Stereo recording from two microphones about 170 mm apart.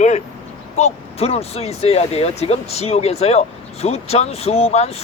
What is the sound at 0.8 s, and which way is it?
Speech, 40° left (ahead or behind).